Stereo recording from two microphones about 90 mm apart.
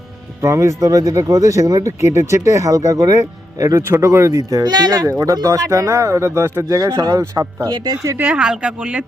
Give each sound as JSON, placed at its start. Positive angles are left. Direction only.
{"t": 0.4, "sound": "speech", "side_deg": -35}
{"t": 8.2, "sound": "a woman's voice", "side_deg": -10}